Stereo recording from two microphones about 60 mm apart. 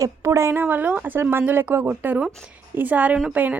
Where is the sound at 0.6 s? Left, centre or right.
Right.